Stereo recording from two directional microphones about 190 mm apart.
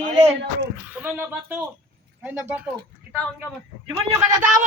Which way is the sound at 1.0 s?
10° right (ahead or behind).